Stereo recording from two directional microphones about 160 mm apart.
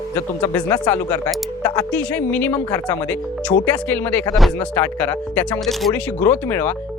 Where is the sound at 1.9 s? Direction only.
10° left (ahead or behind).